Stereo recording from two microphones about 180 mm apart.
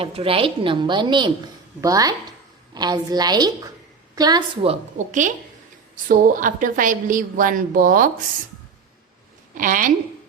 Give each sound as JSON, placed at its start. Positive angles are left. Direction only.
{"t": 0.0, "sound": "a woman's voice", "side_deg": -30}
{"t": 9.6, "sound": "a woman's voice", "side_deg": -45}